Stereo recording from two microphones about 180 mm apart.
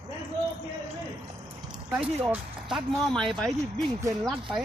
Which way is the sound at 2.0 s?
Centre (ahead or behind).